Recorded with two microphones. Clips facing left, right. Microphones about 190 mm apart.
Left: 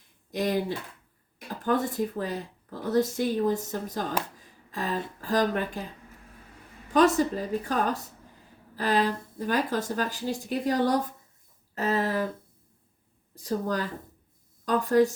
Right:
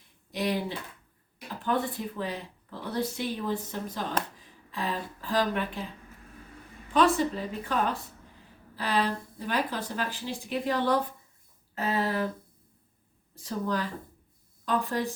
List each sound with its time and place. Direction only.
0.3 s speech: 45° left (ahead or behind)
1.6 s speech: 45° left (ahead or behind)
6.9 s speech: 45° left (ahead or behind)
11.7 s a sound: 40° left (ahead or behind)
13.4 s speech: 45° left (ahead or behind)